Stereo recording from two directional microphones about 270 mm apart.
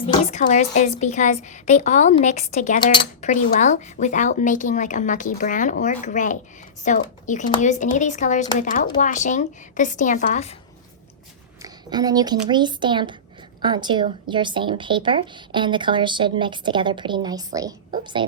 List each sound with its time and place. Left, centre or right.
0.0 s a woman's voice: left
11.6 s a woman's voice: centre